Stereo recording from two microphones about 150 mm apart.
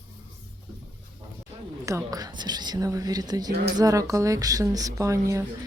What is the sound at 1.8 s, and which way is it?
A woman's voice, 20° right (ahead or behind).